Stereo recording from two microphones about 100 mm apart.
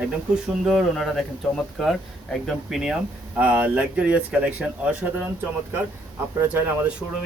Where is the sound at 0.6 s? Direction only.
Centre (ahead or behind).